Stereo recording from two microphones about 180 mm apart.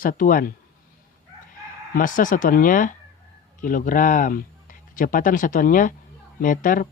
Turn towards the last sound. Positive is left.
turn(degrees=45)  # may be behind; listen again after turning